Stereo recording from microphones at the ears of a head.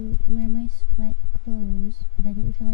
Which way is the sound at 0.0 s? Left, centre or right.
Left.